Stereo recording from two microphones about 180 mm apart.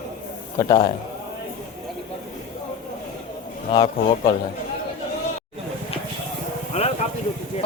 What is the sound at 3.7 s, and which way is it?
Speech, 30° left (ahead or behind).